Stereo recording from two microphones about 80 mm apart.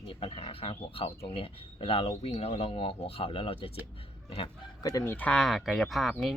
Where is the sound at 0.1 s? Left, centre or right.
Left.